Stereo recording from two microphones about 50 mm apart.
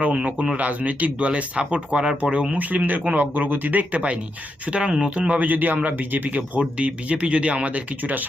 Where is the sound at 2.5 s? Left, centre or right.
Right.